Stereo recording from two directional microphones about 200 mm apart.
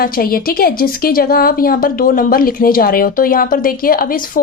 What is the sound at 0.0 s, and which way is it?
Speech, 45° left (ahead or behind).